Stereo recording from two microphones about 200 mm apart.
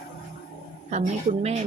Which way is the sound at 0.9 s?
35° right (ahead or behind).